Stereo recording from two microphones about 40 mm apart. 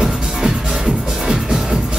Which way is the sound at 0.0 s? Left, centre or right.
Centre.